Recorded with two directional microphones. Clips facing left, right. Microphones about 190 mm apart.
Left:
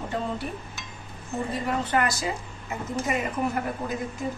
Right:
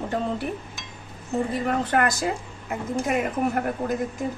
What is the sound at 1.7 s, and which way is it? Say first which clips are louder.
A woman's voice: right 1 dB; 55° right (ahead or behind).